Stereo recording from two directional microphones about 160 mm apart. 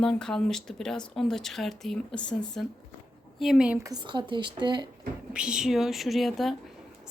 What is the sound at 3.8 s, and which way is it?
Speech, 25° right (ahead or behind).